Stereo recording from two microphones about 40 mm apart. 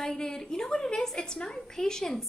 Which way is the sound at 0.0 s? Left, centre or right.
Centre.